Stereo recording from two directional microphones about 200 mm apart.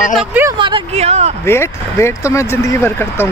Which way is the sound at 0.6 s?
25° right (ahead or behind).